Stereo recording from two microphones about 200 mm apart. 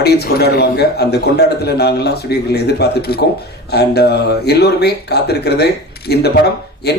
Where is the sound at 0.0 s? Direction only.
55° left (ahead or behind).